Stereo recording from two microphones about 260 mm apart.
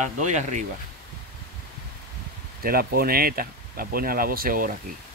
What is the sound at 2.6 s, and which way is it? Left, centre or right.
Speech, right.